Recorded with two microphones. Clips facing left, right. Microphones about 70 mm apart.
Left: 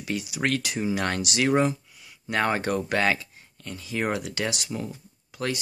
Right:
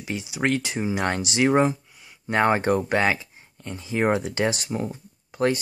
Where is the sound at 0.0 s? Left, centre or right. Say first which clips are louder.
Right 2 dB; right.